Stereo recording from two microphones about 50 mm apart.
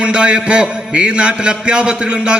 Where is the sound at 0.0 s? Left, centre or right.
Right.